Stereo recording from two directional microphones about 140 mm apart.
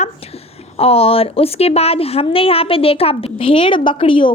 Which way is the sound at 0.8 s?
45° left (ahead or behind).